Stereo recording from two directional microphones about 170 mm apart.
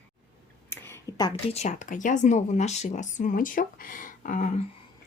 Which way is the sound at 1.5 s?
45° left (ahead or behind).